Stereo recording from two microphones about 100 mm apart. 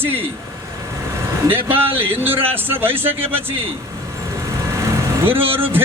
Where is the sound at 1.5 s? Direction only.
20° right (ahead or behind).